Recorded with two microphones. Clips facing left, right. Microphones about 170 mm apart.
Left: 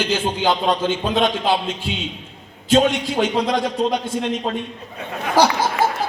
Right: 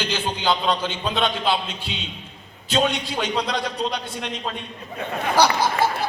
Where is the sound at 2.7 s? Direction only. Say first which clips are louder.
Left 6 dB; 50° left (ahead or behind).